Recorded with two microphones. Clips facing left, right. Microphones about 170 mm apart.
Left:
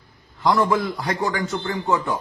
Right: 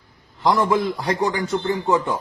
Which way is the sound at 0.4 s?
20° right (ahead or behind).